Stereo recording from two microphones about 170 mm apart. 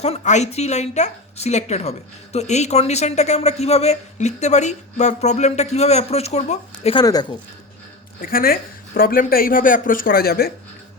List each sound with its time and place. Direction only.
0.0 s a woman's voice: 40° left (ahead or behind)
7.0 s speech: 25° left (ahead or behind)
8.2 s speech: 55° left (ahead or behind)